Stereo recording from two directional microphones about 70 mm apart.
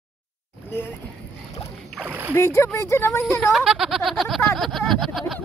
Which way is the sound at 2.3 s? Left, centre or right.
Left.